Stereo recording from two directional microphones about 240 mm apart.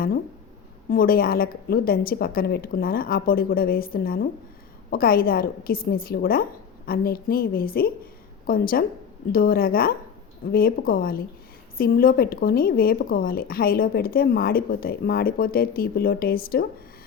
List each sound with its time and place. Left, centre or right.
0.9 s speech: left